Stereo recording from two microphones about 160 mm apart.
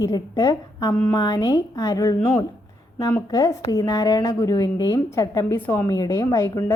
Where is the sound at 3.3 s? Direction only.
20° left (ahead or behind).